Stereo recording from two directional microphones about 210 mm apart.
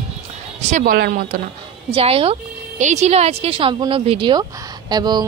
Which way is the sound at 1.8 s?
25° right (ahead or behind).